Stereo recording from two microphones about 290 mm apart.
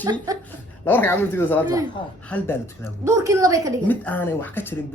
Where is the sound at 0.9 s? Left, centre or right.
Centre.